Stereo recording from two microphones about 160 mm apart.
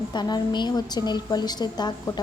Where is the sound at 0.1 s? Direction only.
25° left (ahead or behind).